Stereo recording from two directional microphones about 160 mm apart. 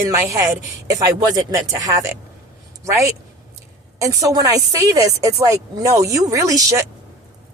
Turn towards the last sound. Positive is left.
turn(degrees=-20)  # may be behind; listen again after turning